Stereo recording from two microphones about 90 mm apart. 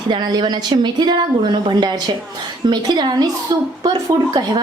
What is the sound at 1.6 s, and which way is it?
A woman's voice, 55° right (ahead or behind).